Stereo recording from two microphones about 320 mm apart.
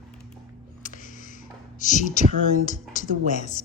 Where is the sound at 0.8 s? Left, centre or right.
Left.